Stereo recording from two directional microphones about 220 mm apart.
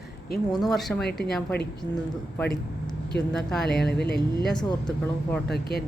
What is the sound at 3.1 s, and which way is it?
Speech, centre (ahead or behind).